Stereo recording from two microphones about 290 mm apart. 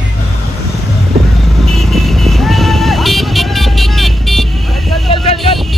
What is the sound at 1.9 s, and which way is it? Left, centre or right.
Vehicle, centre.